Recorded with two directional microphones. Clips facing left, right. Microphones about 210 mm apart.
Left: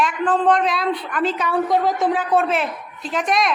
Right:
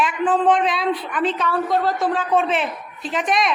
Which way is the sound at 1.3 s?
15° left (ahead or behind).